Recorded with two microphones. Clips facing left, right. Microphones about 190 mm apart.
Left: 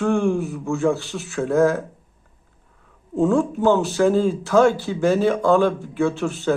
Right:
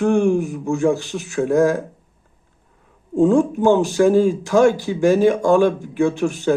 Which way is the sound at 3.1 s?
15° right (ahead or behind).